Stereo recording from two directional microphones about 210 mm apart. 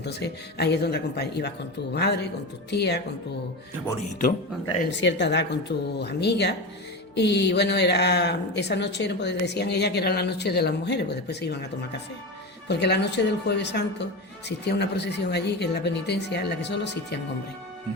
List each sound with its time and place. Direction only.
0.0 s speech: 55° left (ahead or behind)
4.6 s speech: 60° left (ahead or behind)
12.6 s speech: 55° left (ahead or behind)